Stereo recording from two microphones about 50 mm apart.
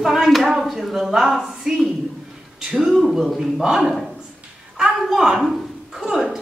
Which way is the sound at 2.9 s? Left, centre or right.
Centre.